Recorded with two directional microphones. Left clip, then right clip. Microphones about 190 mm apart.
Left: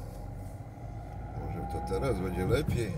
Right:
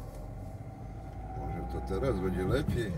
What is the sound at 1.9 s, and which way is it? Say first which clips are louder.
Speech: right 1 dB; 25° left (ahead or behind).